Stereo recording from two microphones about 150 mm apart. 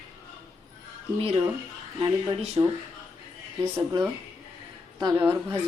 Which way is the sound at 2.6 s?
30° right (ahead or behind).